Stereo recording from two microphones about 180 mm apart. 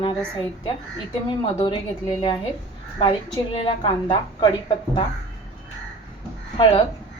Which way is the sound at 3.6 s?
25° left (ahead or behind).